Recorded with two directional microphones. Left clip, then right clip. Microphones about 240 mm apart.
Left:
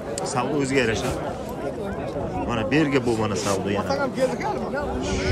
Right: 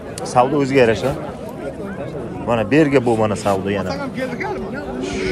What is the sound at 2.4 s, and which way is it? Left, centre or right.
A man's voice, centre.